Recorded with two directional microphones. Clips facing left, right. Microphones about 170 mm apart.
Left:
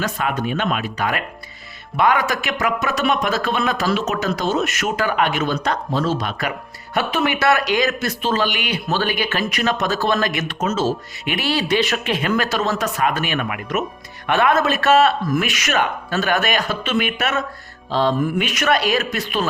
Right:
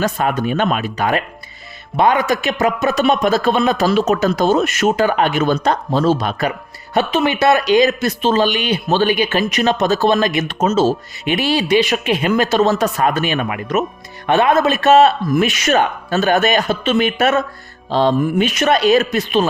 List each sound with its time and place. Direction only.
0.0 s a man's voice: 40° right (ahead or behind)
0.9 s a man's voice: 30° right (ahead or behind)
17.9 s speech: 20° right (ahead or behind)